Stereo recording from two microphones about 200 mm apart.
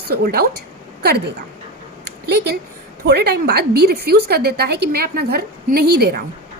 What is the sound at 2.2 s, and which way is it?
A woman's voice, 55° right (ahead or behind).